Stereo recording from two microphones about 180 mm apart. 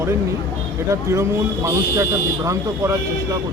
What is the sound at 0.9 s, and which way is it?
Speech, 15° right (ahead or behind).